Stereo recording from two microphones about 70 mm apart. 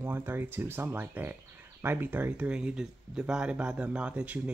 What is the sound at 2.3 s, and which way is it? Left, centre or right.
Speech, centre.